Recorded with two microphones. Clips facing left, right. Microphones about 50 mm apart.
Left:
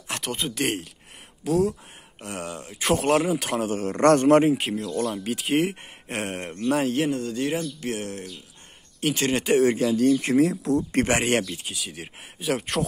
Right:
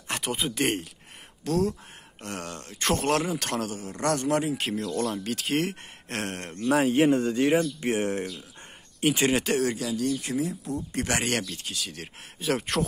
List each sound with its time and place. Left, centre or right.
0.1 s speech: centre
3.7 s a man's voice: left
4.6 s speech: centre
6.7 s speech: centre
7.1 s speech: right
9.0 s speech: centre
9.6 s speech: left
10.3 s speech: left
11.1 s speech: left
11.6 s speech: centre